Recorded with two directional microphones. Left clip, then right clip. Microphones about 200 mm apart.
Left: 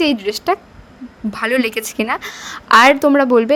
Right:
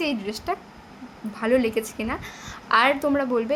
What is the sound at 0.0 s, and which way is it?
A woman's voice, 45° left (ahead or behind).